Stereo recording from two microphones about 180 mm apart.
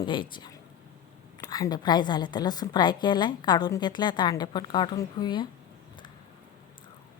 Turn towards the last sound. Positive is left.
turn(degrees=25)  # may be behind; listen again after turning